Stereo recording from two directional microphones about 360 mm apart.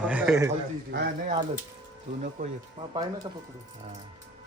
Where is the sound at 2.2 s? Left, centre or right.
Centre.